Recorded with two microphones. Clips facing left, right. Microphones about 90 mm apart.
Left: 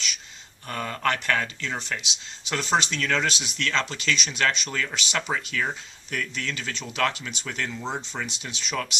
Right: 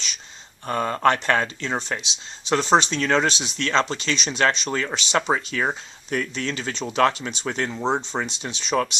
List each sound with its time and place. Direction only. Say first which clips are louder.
0.7 s speech: right 7 dB; 30° right (ahead or behind)